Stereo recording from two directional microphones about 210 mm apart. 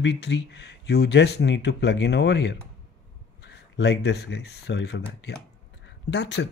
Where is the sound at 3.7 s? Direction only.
55° left (ahead or behind).